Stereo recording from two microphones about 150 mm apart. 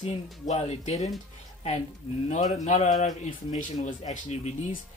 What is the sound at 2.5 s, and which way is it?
A man's voice, 50° left (ahead or behind).